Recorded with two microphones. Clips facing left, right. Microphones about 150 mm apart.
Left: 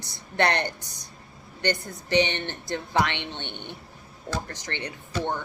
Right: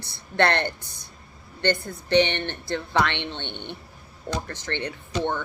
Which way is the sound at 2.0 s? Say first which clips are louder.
Right 3 dB; 15° left (ahead or behind).